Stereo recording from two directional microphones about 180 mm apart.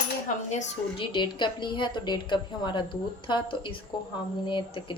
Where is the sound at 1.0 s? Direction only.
25° left (ahead or behind).